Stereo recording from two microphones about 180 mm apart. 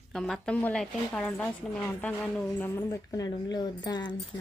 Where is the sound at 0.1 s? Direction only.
5° left (ahead or behind).